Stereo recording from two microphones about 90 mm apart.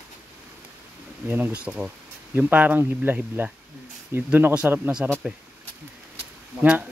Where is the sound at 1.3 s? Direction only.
15° right (ahead or behind).